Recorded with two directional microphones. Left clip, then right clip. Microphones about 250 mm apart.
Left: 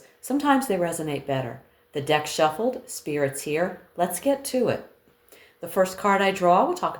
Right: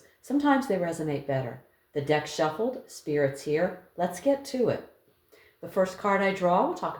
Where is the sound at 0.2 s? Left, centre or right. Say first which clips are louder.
Left 3 dB; left.